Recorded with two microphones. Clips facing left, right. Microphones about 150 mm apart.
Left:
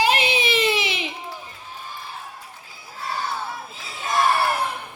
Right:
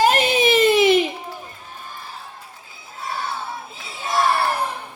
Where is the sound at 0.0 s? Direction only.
45° right (ahead or behind).